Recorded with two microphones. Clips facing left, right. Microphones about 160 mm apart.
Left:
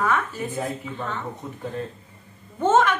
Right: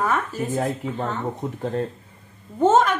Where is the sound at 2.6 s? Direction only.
40° right (ahead or behind).